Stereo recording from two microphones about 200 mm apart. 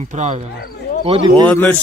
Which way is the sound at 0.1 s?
35° right (ahead or behind).